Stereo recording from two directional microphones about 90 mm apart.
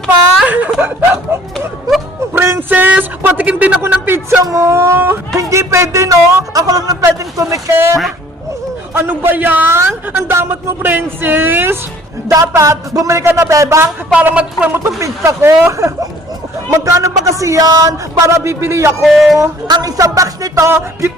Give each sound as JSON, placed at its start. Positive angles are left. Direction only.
{"t": 0.4, "sound": "whimper", "side_deg": -15}
{"t": 0.8, "sound": "a man's voice", "side_deg": -20}
{"t": 8.9, "sound": "a man's voice", "side_deg": -25}
{"t": 12.3, "sound": "a man's voice", "side_deg": -35}
{"t": 14.1, "sound": "speech", "side_deg": -15}
{"t": 14.8, "sound": "a man's voice", "side_deg": -35}
{"t": 19.0, "sound": "speech", "side_deg": 0}
{"t": 19.6, "sound": "a man's voice", "side_deg": -45}